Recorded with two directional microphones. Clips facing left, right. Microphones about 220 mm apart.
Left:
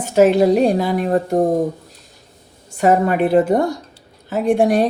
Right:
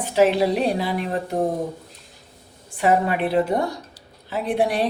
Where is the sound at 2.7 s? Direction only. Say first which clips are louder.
Left 5 dB; 45° left (ahead or behind).